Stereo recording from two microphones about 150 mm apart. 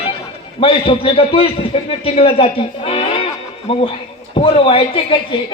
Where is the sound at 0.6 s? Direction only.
35° left (ahead or behind).